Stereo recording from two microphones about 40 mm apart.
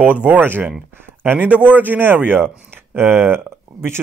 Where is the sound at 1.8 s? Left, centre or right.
Right.